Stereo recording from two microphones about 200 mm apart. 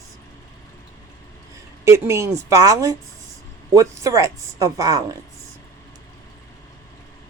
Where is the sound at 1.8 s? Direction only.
15° right (ahead or behind).